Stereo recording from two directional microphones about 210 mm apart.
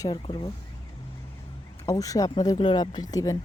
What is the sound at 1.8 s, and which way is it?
Speech, 15° left (ahead or behind).